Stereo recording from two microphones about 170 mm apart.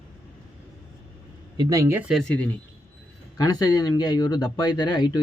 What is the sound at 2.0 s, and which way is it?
Speech, centre (ahead or behind).